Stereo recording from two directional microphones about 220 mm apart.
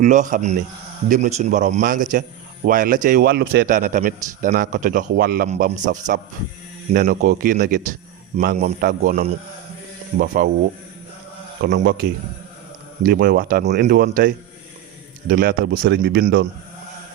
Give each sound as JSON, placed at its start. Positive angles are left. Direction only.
{"t": 0.0, "sound": "a man's voice", "side_deg": -35}
{"t": 11.6, "sound": "a man's voice", "side_deg": -45}